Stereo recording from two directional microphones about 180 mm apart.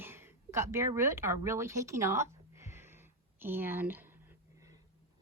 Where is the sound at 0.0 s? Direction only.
10° right (ahead or behind).